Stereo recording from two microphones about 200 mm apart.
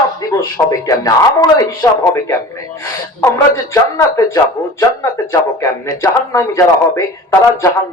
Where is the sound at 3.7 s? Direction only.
15° left (ahead or behind).